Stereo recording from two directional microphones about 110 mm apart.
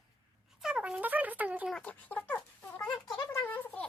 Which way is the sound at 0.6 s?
10° right (ahead or behind).